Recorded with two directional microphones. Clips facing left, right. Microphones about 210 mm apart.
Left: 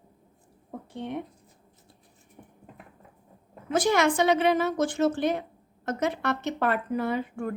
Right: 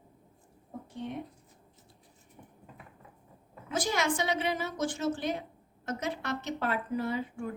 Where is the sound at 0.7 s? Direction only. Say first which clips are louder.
Left 4 dB; 65° left (ahead or behind).